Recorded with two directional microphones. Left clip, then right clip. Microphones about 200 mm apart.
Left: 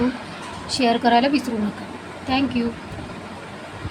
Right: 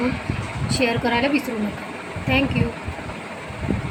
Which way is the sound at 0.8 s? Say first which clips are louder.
Left 3 dB; 45° left (ahead or behind).